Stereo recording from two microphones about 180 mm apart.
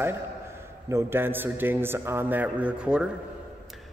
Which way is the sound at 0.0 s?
15° right (ahead or behind).